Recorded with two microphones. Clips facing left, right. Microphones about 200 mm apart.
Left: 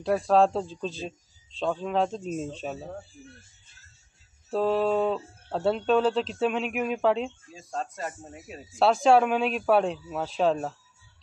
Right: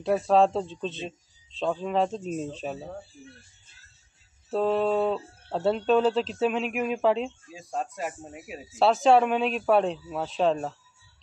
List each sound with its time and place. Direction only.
0.0 s speech: centre (ahead or behind)
4.5 s speech: centre (ahead or behind)
7.5 s speech: 10° right (ahead or behind)